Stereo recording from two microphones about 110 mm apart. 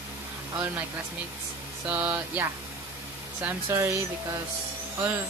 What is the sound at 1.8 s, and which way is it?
Speech, 15° right (ahead or behind).